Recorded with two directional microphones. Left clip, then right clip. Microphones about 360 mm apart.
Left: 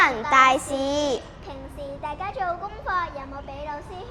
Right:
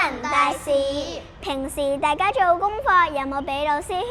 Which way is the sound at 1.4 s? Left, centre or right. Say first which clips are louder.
Right 12 dB; right.